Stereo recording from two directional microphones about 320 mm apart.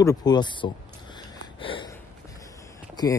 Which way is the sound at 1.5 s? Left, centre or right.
Centre.